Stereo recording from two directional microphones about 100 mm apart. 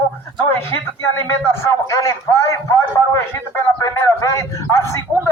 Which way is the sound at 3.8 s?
30° left (ahead or behind).